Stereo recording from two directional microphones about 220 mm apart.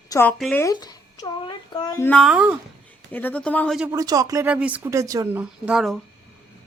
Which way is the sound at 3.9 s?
15° right (ahead or behind).